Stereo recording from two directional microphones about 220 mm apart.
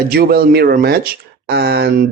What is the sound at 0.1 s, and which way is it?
Speech, 45° right (ahead or behind).